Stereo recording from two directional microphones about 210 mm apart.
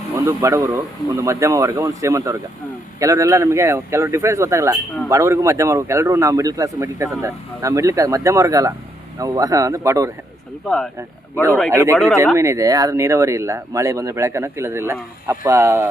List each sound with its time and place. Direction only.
0.1 s speech: 15° right (ahead or behind)
11.7 s speech: 15° right (ahead or behind)